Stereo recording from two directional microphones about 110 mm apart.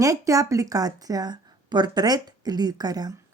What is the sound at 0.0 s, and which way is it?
A woman's voice, 30° right (ahead or behind).